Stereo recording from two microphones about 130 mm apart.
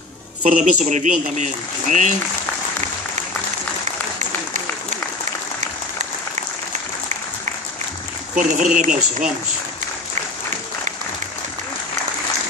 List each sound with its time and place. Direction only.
0.4 s a man's voice: 75° right (ahead or behind)
8.4 s a man's voice: 80° right